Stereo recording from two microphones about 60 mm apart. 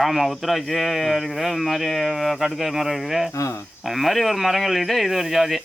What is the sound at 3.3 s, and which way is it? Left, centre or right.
Speech, left.